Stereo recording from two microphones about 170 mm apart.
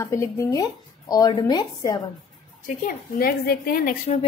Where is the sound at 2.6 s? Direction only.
55° left (ahead or behind).